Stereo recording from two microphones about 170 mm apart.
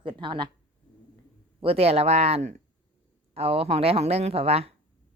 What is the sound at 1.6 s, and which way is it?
Speech, 35° right (ahead or behind).